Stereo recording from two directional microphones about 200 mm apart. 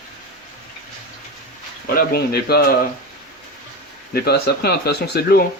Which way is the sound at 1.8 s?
45° left (ahead or behind).